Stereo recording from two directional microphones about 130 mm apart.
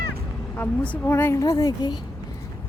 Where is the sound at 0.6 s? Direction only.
15° left (ahead or behind); by 1.9 s 30° left (ahead or behind).